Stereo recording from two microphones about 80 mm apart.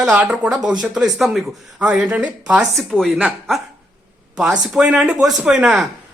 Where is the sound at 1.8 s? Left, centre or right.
Centre.